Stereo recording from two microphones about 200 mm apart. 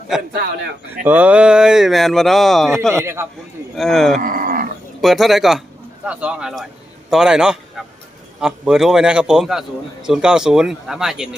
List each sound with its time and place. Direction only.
0.1 s a man's voice: 5° right (ahead or behind)
3.0 s a man's voice: 15° right (ahead or behind)
3.8 s a man's voice: centre (ahead or behind)
4.2 s livestock: 45° right (ahead or behind)
4.9 s a man's voice: centre (ahead or behind)